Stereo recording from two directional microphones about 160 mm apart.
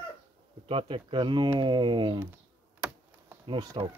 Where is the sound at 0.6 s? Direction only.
35° right (ahead or behind).